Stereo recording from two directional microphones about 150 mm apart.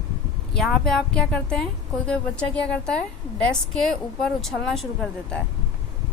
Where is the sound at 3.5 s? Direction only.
5° left (ahead or behind).